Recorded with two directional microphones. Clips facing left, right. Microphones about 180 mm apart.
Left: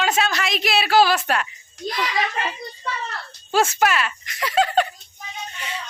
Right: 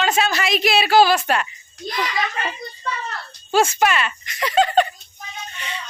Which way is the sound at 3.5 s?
Centre (ahead or behind).